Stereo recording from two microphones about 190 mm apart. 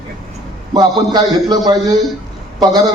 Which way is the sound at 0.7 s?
20° right (ahead or behind).